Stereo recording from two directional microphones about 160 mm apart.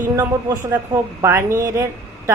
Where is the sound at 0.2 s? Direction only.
15° right (ahead or behind).